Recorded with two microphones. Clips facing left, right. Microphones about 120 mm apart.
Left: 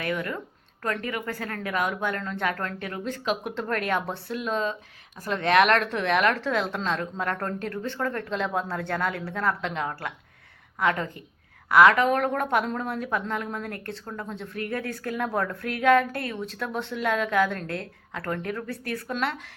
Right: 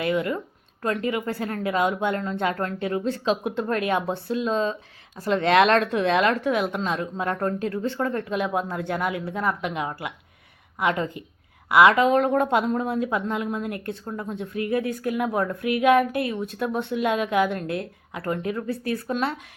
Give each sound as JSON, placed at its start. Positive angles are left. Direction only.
{"t": 0.0, "sound": "a woman's voice", "side_deg": -20}